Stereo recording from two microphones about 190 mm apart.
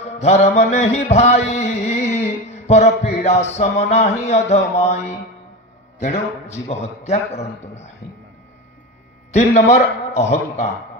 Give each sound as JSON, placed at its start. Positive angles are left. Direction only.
{"t": 0.2, "sound": "mantra", "side_deg": 35}
{"t": 2.6, "sound": "a sound", "side_deg": 35}
{"t": 3.5, "sound": "mantra", "side_deg": 35}
{"t": 6.0, "sound": "mantra", "side_deg": 35}
{"t": 9.3, "sound": "mantra", "side_deg": 35}